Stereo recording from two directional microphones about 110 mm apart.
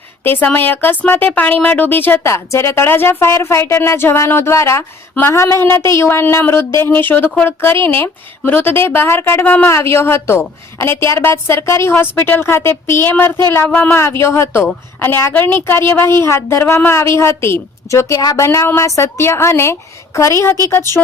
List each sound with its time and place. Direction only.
0.3 s a woman's voice: 15° left (ahead or behind)